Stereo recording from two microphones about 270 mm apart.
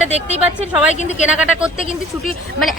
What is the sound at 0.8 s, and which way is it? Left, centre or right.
Speech, centre.